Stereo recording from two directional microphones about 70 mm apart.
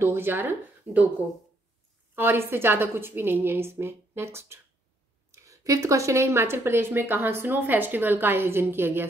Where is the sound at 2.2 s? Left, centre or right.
Right.